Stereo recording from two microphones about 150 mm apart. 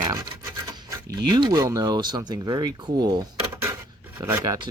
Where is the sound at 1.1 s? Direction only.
25° right (ahead or behind).